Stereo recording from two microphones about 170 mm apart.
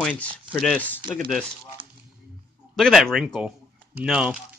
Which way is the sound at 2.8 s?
Centre (ahead or behind).